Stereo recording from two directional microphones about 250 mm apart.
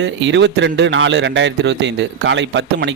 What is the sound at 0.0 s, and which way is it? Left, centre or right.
Speech, right.